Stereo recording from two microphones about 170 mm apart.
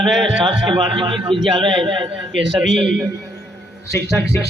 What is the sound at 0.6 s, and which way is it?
A man's voice, 30° right (ahead or behind).